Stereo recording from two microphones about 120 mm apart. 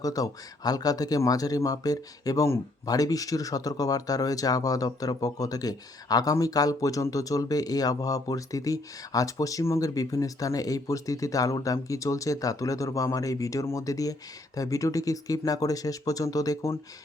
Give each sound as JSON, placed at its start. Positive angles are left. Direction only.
{"t": 0.0, "sound": "speech", "side_deg": 30}